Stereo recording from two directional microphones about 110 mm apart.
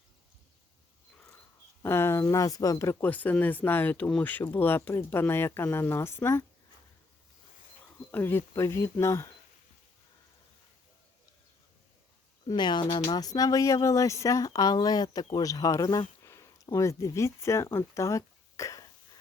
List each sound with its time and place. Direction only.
1.8 s speech: 25° left (ahead or behind)
3.0 s speech: 15° left (ahead or behind)
8.1 s speech: 20° left (ahead or behind)
12.5 s speech: 40° left (ahead or behind)
16.2 s a sound: 25° left (ahead or behind)
16.7 s speech: 30° left (ahead or behind)